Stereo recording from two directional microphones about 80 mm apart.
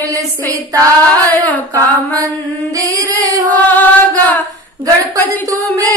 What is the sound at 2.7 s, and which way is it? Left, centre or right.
Music, right.